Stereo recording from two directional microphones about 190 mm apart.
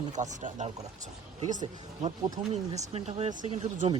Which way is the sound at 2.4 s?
25° right (ahead or behind).